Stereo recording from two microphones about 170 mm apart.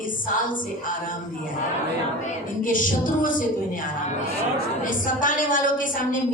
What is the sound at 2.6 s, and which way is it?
Speech, 50° left (ahead or behind).